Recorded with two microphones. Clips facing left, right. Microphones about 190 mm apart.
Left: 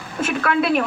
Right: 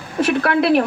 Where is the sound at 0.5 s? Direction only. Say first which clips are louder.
Right 4 dB; 65° right (ahead or behind).